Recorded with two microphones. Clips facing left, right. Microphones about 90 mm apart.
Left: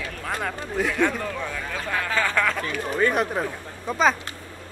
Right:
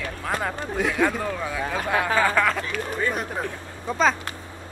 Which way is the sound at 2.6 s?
65° left (ahead or behind).